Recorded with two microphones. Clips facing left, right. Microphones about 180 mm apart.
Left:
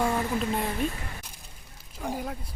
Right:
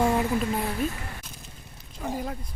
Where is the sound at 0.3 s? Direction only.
Centre (ahead or behind).